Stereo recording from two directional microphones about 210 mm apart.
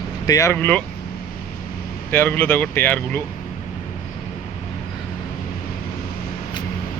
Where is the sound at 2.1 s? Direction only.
10° left (ahead or behind).